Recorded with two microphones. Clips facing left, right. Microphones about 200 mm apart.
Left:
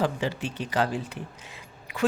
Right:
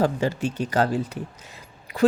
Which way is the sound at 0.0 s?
45° right (ahead or behind).